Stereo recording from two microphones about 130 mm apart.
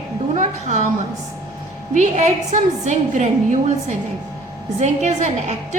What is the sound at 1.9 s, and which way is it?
A woman's voice, 65° right (ahead or behind).